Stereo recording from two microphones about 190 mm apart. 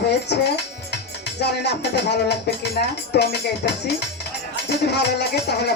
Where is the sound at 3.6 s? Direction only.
50° left (ahead or behind).